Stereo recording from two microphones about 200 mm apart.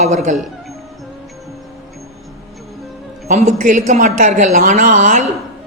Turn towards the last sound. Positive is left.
turn(degrees=-40)  # may be behind; listen again after turning